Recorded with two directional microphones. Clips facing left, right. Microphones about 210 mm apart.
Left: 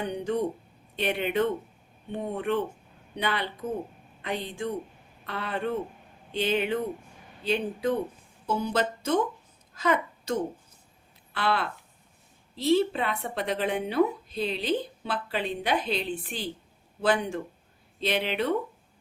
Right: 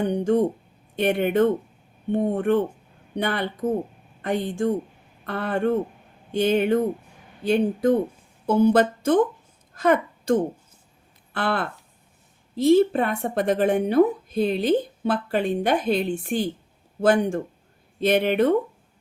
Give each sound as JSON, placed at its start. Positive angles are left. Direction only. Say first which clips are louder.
{"t": 0.0, "sound": "a woman's voice", "louder": "right 8 dB", "side_deg": -50}